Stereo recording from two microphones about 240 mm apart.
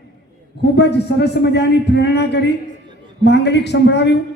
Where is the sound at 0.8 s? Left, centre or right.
Left.